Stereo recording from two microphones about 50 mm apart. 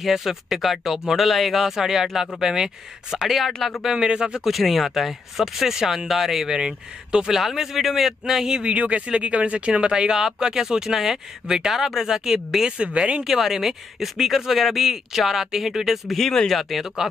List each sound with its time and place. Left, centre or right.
0.0 s speech: centre
3.5 s speech: centre
3.8 s speech: centre
4.5 s speech: centre
7.3 s speech: centre
8.6 s speech: right; by 12.7 s centre
12.7 s speech: right
13.2 s speech: centre